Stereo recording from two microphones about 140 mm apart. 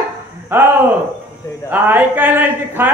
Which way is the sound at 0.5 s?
15° right (ahead or behind).